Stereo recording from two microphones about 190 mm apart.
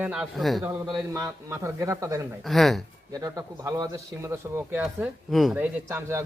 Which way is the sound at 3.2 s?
20° right (ahead or behind).